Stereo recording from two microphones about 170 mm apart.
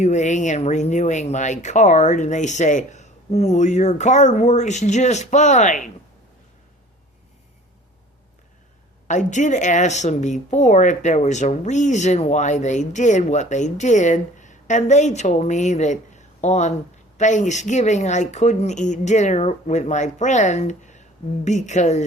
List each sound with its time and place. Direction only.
0.0 s speech: 45° left (ahead or behind)
9.0 s speech: 45° left (ahead or behind)